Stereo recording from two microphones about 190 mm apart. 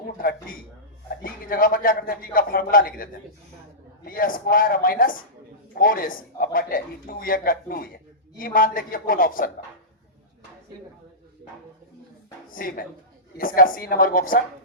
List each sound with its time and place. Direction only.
0.2 s a man's voice: 50° left (ahead or behind)
12.5 s a woman's voice: 50° left (ahead or behind)